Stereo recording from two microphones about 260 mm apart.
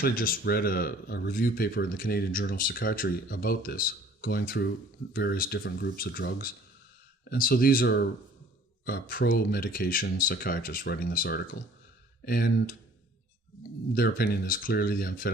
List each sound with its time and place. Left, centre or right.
0.0 s speech: left
13.9 s speech: left